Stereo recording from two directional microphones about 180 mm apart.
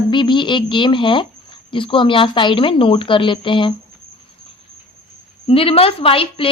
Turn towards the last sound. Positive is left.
turn(degrees=30)  # may be behind; listen again after turning